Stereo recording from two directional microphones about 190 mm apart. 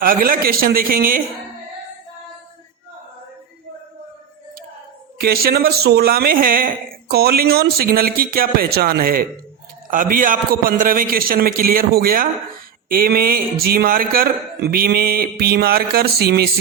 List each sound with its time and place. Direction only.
0.0 s speech: 50° right (ahead or behind)
5.2 s speech: 55° right (ahead or behind)